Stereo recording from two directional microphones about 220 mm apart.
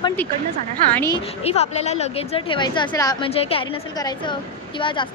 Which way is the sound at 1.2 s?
30° left (ahead or behind).